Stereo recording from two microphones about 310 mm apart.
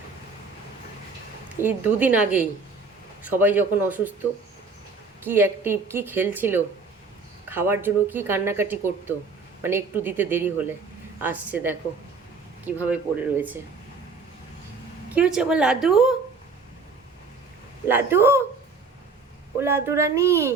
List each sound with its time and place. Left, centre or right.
1.6 s speech: centre
15.1 s speech: centre
17.8 s speech: centre
19.5 s speech: centre